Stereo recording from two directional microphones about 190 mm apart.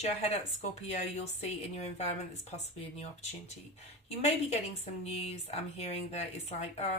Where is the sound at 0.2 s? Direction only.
35° left (ahead or behind).